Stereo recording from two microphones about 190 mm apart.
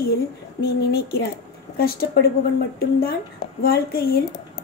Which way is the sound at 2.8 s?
55° left (ahead or behind).